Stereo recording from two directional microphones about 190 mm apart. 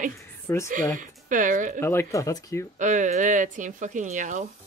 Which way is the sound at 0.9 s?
45° right (ahead or behind).